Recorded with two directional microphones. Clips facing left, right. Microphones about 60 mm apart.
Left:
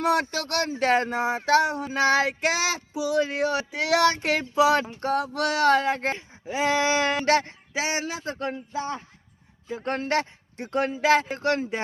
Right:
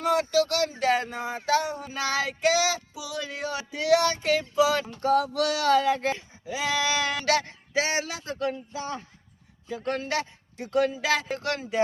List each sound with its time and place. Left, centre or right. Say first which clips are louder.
0.0 s speech: right 1 dB; left
1.9 s child singing: left 6 dB; left
4.9 s speech: right 2 dB; left
7.7 s speech: right 2 dB; centre
8.0 s speech: even; left